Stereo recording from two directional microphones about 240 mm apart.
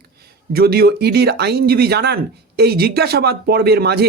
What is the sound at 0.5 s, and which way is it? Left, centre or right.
Speech, right.